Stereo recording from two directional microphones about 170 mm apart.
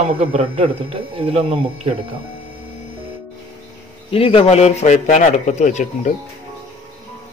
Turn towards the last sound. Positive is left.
turn(degrees=45)  # may be behind; listen again after turning